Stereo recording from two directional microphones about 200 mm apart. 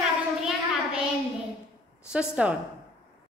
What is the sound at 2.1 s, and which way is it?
Speech, 5° right (ahead or behind).